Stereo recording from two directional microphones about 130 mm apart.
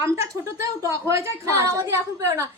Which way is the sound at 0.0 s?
20° right (ahead or behind).